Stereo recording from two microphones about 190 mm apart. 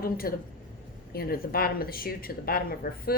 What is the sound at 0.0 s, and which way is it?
A woman's voice, 50° left (ahead or behind).